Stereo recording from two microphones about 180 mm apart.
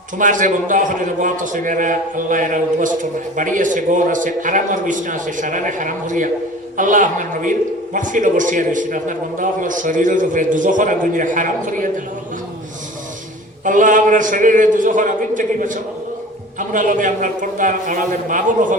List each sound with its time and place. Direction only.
0.2 s a man's voice: 45° right (ahead or behind)
13.7 s a man's voice: 45° right (ahead or behind)